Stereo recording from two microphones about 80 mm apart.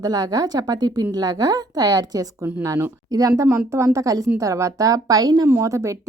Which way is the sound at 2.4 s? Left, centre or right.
Right.